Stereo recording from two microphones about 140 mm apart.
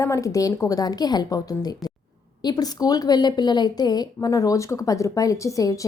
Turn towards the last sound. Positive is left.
turn(degrees=25)  # may be behind; listen again after turning